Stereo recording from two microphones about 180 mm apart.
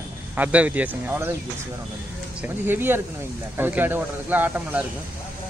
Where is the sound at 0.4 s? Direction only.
10° right (ahead or behind).